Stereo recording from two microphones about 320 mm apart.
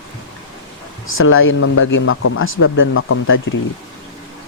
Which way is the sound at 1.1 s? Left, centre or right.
Left.